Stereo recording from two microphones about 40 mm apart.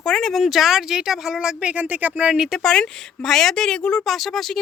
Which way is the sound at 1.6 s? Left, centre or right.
Right.